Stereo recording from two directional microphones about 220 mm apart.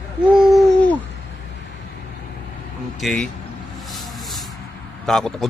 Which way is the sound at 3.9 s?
Centre (ahead or behind).